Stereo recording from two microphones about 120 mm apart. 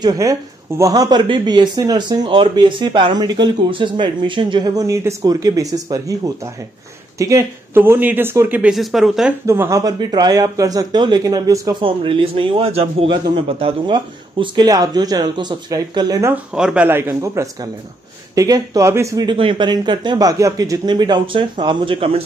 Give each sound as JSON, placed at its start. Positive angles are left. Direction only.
{"t": 0.0, "sound": "speech", "side_deg": -30}
{"t": 8.7, "sound": "speech", "side_deg": 0}
{"t": 9.5, "sound": "speech", "side_deg": -25}
{"t": 11.8, "sound": "a man's voice", "side_deg": -45}
{"t": 16.5, "sound": "speech", "side_deg": -10}
{"t": 19.2, "sound": "speech", "side_deg": -45}